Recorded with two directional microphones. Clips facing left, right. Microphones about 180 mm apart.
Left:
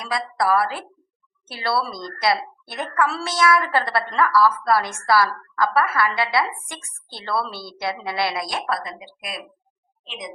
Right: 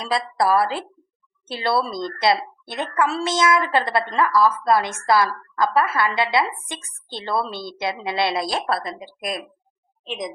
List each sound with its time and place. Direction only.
0.0 s a woman's voice: 25° right (ahead or behind); by 9.4 s 45° right (ahead or behind)